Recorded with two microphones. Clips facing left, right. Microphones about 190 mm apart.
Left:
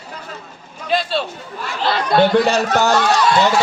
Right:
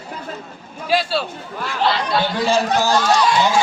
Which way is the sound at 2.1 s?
65° left (ahead or behind).